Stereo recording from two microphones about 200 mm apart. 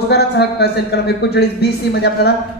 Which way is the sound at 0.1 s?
55° left (ahead or behind).